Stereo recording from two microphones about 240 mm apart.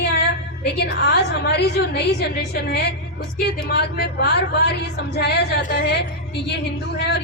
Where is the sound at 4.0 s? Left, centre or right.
Left.